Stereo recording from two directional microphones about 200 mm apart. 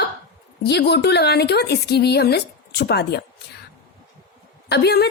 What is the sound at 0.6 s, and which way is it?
A woman's voice, 55° left (ahead or behind).